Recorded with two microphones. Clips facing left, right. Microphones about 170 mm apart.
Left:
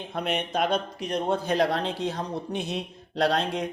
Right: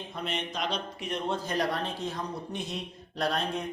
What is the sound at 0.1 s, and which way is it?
Speech, 60° left (ahead or behind).